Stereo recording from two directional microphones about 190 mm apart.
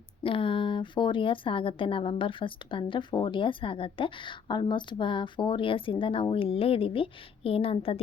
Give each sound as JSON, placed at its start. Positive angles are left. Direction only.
{"t": 0.2, "sound": "a woman's voice", "side_deg": 30}